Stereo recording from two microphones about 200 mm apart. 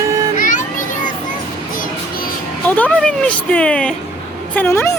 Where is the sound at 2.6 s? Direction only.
10° left (ahead or behind).